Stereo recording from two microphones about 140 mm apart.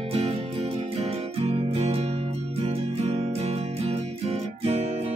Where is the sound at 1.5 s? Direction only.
50° right (ahead or behind).